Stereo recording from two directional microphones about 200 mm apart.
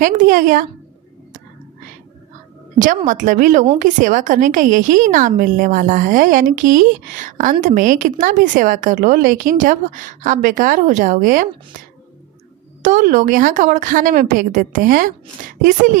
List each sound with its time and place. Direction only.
0.0 s a woman's voice: 40° right (ahead or behind)
2.7 s a woman's voice: 40° right (ahead or behind)
12.8 s a woman's voice: 40° right (ahead or behind)